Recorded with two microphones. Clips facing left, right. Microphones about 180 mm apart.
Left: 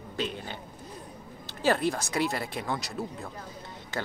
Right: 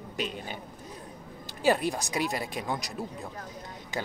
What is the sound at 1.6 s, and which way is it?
Speech, 15° right (ahead or behind).